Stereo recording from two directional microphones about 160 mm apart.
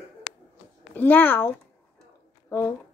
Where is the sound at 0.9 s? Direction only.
10° left (ahead or behind).